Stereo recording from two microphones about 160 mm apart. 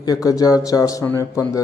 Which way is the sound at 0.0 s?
20° left (ahead or behind).